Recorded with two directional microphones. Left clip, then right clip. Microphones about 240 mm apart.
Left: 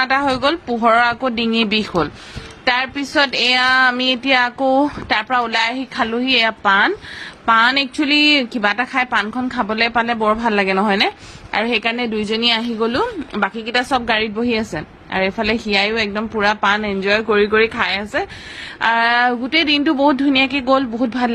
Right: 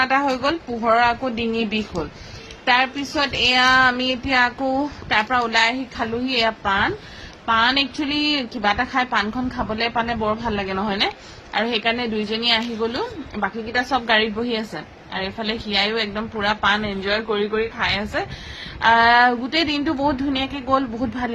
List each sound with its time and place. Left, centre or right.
0.0 s a woman's voice: left